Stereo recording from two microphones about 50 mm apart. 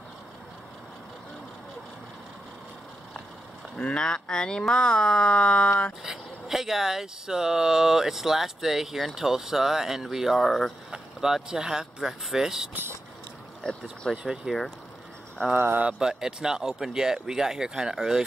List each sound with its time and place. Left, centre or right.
3.7 s speech: centre
6.0 s speech: centre
10.4 s speech: centre
10.9 s speech: centre
13.6 s speech: centre
14.2 s speech: centre
15.5 s speech: right
15.8 s speech: centre